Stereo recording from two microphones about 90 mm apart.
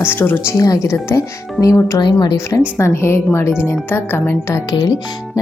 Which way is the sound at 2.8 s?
30° left (ahead or behind).